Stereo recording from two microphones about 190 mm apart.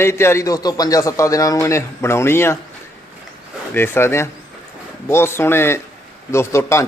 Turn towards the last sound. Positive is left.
turn(degrees=15)  # may be behind; listen again after turning